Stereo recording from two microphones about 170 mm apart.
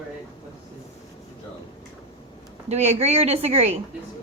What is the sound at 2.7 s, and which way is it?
A woman's voice, 40° right (ahead or behind).